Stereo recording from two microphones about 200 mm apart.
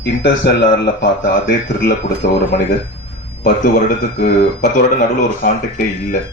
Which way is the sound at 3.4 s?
50° left (ahead or behind).